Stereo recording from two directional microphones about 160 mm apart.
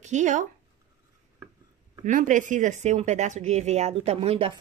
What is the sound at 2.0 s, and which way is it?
Speech, 50° right (ahead or behind).